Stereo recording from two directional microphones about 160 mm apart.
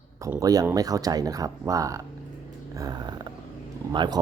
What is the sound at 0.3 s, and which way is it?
A man's voice, 20° right (ahead or behind).